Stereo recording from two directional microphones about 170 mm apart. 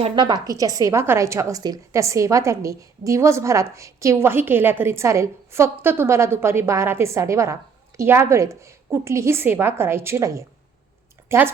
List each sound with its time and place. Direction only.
0.0 s a woman's voice: 25° right (ahead or behind)